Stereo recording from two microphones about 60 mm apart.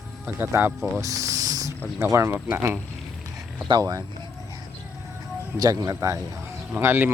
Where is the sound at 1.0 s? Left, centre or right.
Right.